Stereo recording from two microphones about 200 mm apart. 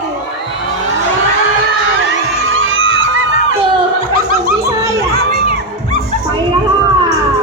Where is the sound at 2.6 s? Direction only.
75° right (ahead or behind).